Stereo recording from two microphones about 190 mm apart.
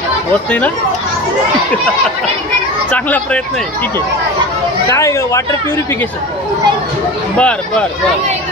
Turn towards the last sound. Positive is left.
turn(degrees=5)  # may be behind; listen again after turning